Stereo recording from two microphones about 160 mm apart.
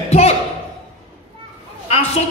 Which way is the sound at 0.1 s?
40° left (ahead or behind).